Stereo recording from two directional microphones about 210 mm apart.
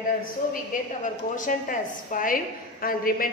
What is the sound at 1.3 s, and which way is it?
A woman's voice, 40° left (ahead or behind).